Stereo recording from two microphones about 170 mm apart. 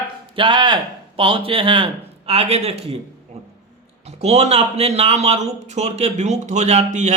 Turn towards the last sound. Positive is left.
turn(degrees=-40)  # may be behind; listen again after turning